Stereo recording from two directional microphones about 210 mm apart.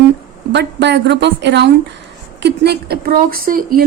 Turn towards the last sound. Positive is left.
turn(degrees=-45)  # may be behind; listen again after turning